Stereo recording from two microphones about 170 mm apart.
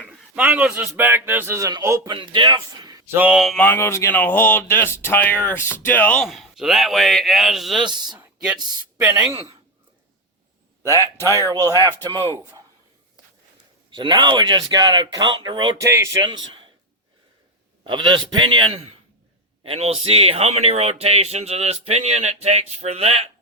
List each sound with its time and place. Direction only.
0.3 s speech: 10° right (ahead or behind)
3.2 s a man's voice: 5° right (ahead or behind)
3.7 s speech: 15° left (ahead or behind)
6.2 s a man's voice: centre (ahead or behind)
7.8 s speech: 25° right (ahead or behind)
10.8 s speech: 15° right (ahead or behind)
13.9 s speech: 25° right (ahead or behind)
15.8 s speech: 15° right (ahead or behind)
17.8 s speech: 30° right (ahead or behind)